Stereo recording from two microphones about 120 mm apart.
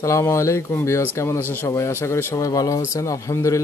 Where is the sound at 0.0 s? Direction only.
25° left (ahead or behind).